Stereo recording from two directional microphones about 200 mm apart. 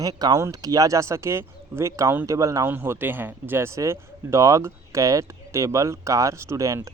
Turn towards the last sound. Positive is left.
turn(degrees=-15)  # may be behind; listen again after turning